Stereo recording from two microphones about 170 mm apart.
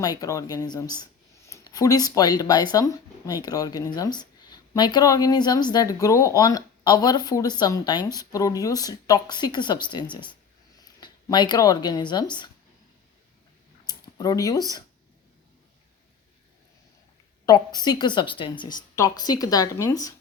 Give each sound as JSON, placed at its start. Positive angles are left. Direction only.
{"t": 0.0, "sound": "speech", "side_deg": 20}
{"t": 13.8, "sound": "speech", "side_deg": 20}
{"t": 17.4, "sound": "speech", "side_deg": 25}